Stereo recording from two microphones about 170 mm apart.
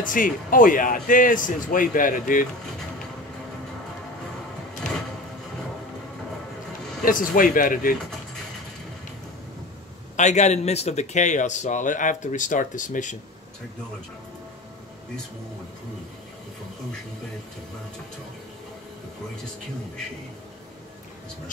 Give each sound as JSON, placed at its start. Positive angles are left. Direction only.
{"t": 0.0, "sound": "a man's voice", "side_deg": 55}
{"t": 7.1, "sound": "a man's voice", "side_deg": 55}
{"t": 10.1, "sound": "a man's voice", "side_deg": 45}